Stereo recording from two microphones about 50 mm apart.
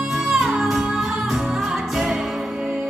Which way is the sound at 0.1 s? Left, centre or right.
Centre.